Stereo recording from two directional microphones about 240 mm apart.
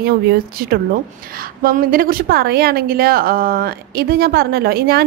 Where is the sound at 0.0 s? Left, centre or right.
Right.